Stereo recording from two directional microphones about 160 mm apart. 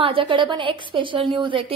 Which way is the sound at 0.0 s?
35° right (ahead or behind).